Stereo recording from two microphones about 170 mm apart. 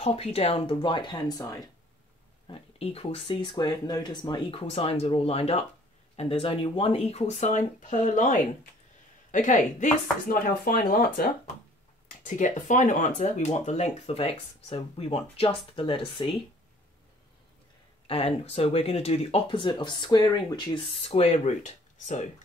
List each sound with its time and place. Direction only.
0.0 s speech: 35° left (ahead or behind); by 1.6 s 20° left (ahead or behind)
2.4 s speech: 35° left (ahead or behind)
4.6 s speech: 35° left (ahead or behind); by 11.3 s 60° left (ahead or behind)
12.3 s speech: 45° left (ahead or behind); by 16.3 s 30° left (ahead or behind)
18.0 s speech: 35° left (ahead or behind)